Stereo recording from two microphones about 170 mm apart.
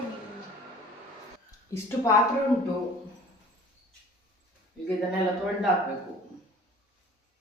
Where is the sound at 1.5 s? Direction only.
15° left (ahead or behind).